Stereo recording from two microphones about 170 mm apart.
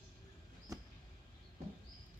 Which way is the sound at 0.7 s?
20° right (ahead or behind).